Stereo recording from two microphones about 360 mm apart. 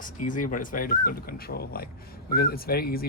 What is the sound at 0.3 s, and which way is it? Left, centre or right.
Speech, left.